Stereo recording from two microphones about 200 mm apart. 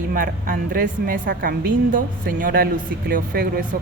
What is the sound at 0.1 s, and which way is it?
A woman's voice, 45° right (ahead or behind).